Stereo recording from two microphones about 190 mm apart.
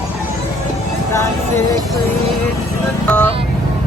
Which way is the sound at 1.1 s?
15° left (ahead or behind).